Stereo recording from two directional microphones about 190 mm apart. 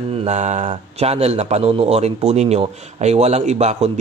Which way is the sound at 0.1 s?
35° right (ahead or behind).